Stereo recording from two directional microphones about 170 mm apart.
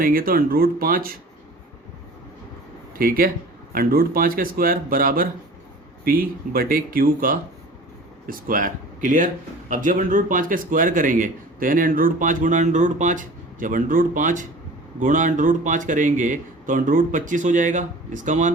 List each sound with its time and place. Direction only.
0.0 s speech: 60° right (ahead or behind)
3.0 s speech: 60° right (ahead or behind)